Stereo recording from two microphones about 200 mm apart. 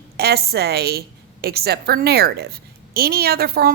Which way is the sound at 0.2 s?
50° right (ahead or behind).